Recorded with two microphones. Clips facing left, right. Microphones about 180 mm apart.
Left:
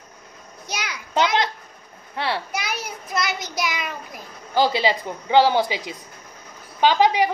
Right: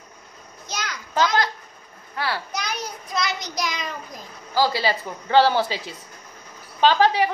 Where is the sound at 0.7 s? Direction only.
10° left (ahead or behind).